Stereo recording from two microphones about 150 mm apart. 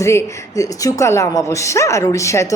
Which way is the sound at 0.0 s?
20° left (ahead or behind).